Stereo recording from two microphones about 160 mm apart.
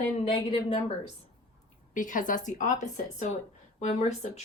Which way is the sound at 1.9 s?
55° left (ahead or behind).